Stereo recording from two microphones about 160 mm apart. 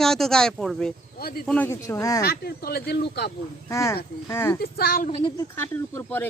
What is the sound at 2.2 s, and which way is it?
Speech, 85° left.